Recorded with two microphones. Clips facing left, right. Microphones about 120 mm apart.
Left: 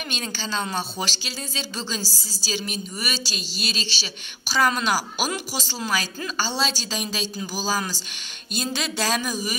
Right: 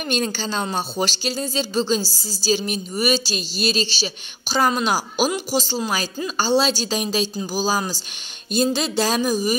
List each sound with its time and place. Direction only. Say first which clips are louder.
0.1 s speech: right 7 dB; 45° right (ahead or behind)
4.5 s speech: right 2 dB; 25° right (ahead or behind)